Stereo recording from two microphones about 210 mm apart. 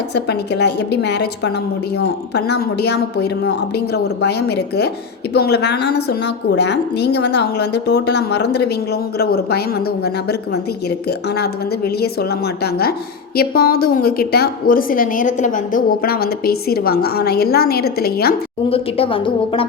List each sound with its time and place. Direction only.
0.1 s a woman's voice: 50° left (ahead or behind)
13.3 s a woman's voice: 45° left (ahead or behind)
18.7 s a woman's voice: 25° left (ahead or behind)